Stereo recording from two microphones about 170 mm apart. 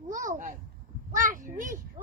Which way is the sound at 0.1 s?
50° right (ahead or behind).